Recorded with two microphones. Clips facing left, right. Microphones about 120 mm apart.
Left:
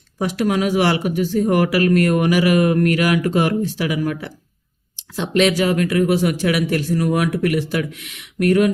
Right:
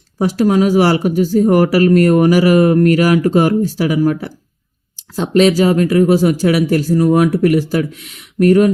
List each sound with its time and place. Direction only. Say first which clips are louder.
0.2 s speech: right 6 dB; 35° right (ahead or behind)